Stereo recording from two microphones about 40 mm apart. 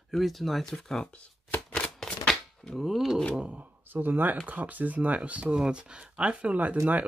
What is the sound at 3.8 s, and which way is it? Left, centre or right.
Speech, right.